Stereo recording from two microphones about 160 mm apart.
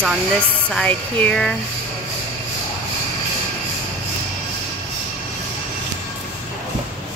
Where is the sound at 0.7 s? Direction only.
5° left (ahead or behind).